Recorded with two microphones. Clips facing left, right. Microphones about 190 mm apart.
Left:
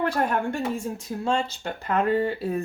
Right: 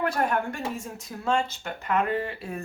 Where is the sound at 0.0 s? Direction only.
30° left (ahead or behind).